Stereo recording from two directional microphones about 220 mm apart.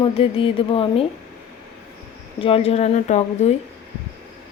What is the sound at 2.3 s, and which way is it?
A woman's voice, 25° left (ahead or behind).